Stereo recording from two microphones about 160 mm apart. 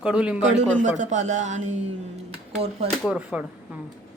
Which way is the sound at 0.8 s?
50° right (ahead or behind).